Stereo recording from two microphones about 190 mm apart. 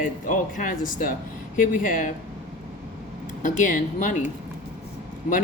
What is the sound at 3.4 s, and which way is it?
Speech, 45° left (ahead or behind).